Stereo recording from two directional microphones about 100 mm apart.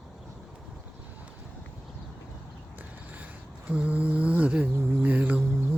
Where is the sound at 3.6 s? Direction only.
15° right (ahead or behind).